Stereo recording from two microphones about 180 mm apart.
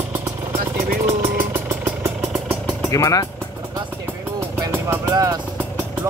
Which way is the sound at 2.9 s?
20° left (ahead or behind).